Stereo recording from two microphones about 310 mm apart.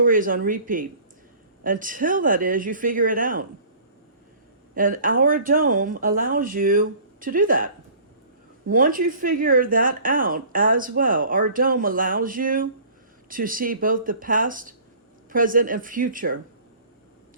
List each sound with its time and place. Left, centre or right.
0.0 s speech: right
4.7 s speech: right
8.7 s speech: right